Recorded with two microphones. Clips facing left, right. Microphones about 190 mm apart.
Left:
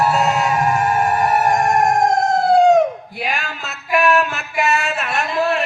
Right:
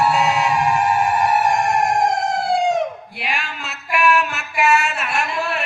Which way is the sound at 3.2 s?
40° left (ahead or behind).